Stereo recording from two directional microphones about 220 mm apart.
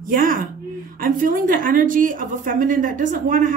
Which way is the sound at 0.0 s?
40° right (ahead or behind).